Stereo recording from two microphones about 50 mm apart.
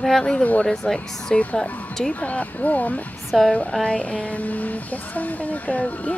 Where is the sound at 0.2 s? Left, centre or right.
Centre.